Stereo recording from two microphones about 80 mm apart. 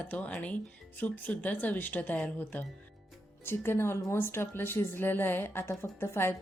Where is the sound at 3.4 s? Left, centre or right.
Left.